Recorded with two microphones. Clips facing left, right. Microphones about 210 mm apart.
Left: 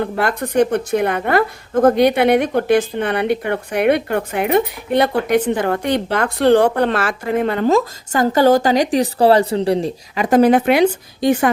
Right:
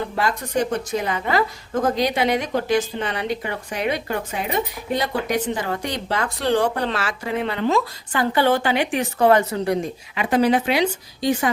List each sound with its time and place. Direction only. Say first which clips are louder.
0.0 s a woman's voice: left 5 dB; 60° left (ahead or behind); by 10.2 s 30° left (ahead or behind)
10.2 s speech: left 6 dB; 50° left (ahead or behind)